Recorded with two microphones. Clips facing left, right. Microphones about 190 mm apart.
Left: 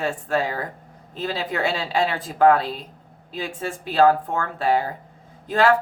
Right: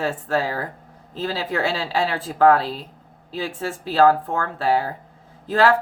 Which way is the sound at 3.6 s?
20° left (ahead or behind).